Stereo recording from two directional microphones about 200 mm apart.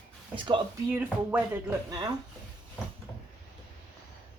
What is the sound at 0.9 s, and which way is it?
Speech, 10° right (ahead or behind).